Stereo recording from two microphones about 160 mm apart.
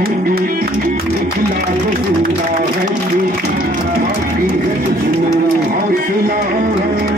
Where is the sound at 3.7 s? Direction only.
65° right (ahead or behind).